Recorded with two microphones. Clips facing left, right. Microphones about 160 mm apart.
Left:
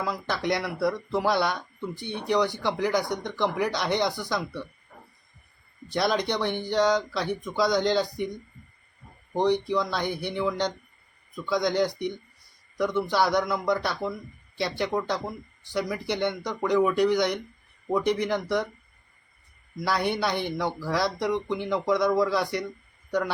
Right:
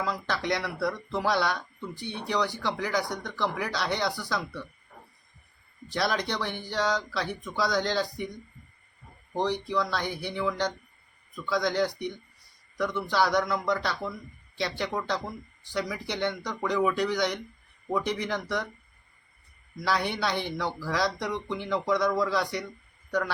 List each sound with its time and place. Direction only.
0.0 s speech: 15° left (ahead or behind)
5.9 s speech: 15° left (ahead or behind)
9.3 s speech: 20° left (ahead or behind)
19.7 s speech: 10° left (ahead or behind)